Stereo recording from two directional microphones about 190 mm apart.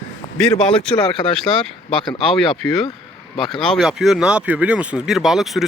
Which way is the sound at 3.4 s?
Centre (ahead or behind).